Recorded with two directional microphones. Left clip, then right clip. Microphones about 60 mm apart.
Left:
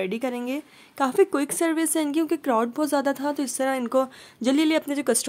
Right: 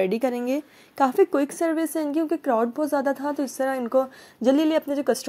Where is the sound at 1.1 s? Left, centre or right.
Centre.